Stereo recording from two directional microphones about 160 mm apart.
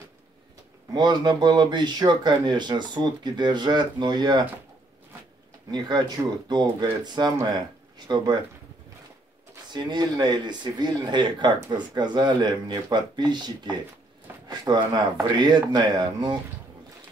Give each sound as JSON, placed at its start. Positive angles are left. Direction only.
{"t": 0.9, "sound": "speech", "side_deg": -25}
{"t": 5.7, "sound": "speech", "side_deg": -25}
{"t": 9.7, "sound": "speech", "side_deg": -25}
{"t": 14.5, "sound": "a sound", "side_deg": -25}
{"t": 15.3, "sound": "speech", "side_deg": -25}